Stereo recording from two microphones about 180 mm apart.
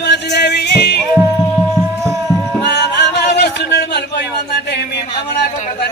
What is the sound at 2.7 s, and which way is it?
Music, 70° left (ahead or behind).